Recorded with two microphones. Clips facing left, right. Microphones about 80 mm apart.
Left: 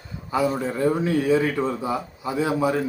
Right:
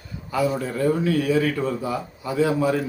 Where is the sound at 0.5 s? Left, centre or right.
Left.